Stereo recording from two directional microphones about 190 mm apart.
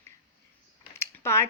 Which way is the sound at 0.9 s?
15° left (ahead or behind).